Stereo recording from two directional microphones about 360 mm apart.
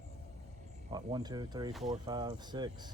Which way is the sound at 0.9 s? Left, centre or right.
Centre.